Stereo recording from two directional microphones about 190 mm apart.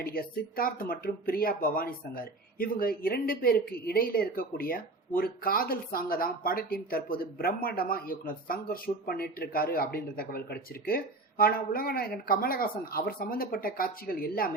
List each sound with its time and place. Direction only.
0.0 s speech: 50° left (ahead or behind)